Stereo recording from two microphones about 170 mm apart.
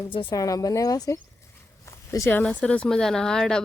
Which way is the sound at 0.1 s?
30° left (ahead or behind).